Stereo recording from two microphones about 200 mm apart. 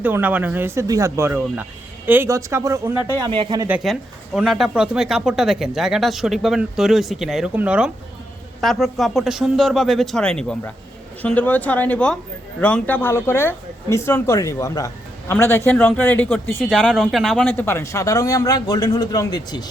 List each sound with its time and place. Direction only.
0.0 s speech: 10° right (ahead or behind)
4.4 s speech: centre (ahead or behind); by 19.6 s 20° left (ahead or behind)